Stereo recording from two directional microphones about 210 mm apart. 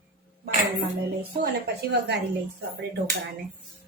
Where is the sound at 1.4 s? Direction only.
50° right (ahead or behind).